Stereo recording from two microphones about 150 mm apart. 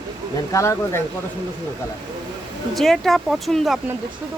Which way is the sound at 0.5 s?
20° left (ahead or behind).